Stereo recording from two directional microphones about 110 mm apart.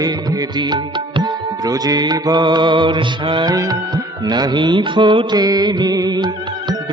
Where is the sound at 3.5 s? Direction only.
35° right (ahead or behind).